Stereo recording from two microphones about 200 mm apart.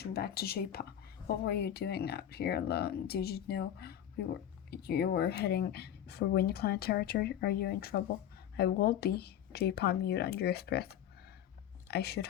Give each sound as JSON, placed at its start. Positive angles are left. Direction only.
{"t": 0.0, "sound": "speech", "side_deg": 50}
{"t": 11.9, "sound": "speech", "side_deg": 55}